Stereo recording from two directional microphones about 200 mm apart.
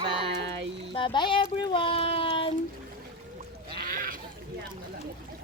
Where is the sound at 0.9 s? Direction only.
25° left (ahead or behind).